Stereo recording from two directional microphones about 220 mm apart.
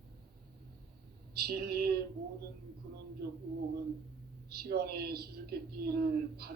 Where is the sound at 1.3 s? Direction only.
45° right (ahead or behind).